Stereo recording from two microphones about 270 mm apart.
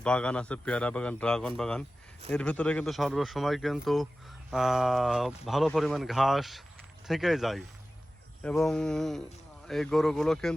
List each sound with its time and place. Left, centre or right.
0.0 s speech: centre